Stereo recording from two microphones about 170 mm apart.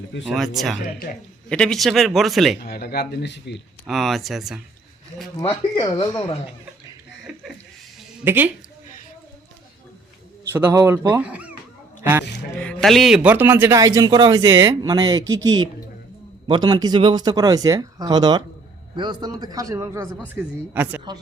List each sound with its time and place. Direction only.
0.3 s speech: centre (ahead or behind)
0.8 s speech: 50° left (ahead or behind)
1.5 s speech: 5° left (ahead or behind)
2.6 s speech: 65° left (ahead or behind); by 3.6 s 90° left
3.8 s speech: centre (ahead or behind)
5.4 s speech: 30° left (ahead or behind)
7.3 s chuckle: 5° right (ahead or behind)
8.2 s speech: 15° right (ahead or behind)
10.5 s speech: 15° right (ahead or behind)
12.5 s speech: 5° left (ahead or behind)